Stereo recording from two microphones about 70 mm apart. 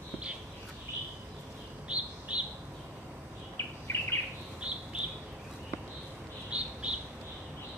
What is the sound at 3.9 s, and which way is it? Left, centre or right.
Bird, left.